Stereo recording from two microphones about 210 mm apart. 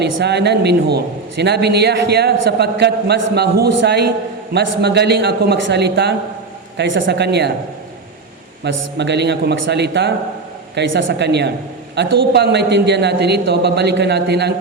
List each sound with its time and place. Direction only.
0.0 s a man's voice: 55° right (ahead or behind)
8.6 s a man's voice: 55° right (ahead or behind)